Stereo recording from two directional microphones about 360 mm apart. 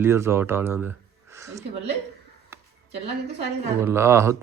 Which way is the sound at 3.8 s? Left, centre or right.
Centre.